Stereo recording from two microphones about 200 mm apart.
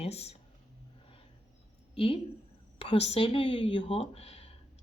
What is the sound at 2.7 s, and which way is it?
A woman's voice, 30° left (ahead or behind).